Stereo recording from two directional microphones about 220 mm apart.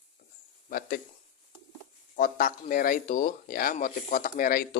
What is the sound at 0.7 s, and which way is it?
Speech, 40° left (ahead or behind).